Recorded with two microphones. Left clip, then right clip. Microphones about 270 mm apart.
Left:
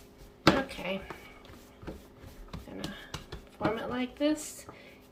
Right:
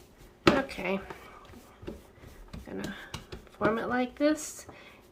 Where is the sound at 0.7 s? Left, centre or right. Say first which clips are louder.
Right 3 dB; centre.